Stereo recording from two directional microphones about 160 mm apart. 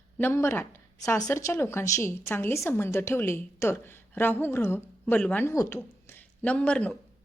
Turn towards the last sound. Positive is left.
turn(degrees=5)  # may be behind; listen again after turning